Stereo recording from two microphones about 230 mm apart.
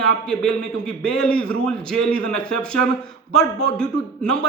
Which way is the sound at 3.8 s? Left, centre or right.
Centre.